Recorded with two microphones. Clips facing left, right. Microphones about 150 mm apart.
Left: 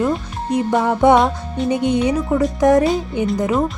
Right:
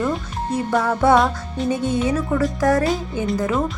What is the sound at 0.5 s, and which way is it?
Music, 20° left (ahead or behind).